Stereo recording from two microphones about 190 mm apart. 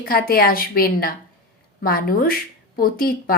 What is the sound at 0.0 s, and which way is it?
Speech, 50° left (ahead or behind).